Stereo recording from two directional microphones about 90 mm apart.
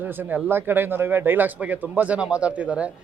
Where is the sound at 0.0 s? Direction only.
20° right (ahead or behind).